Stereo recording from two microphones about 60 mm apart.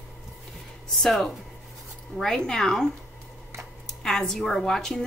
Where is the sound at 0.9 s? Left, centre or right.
Centre.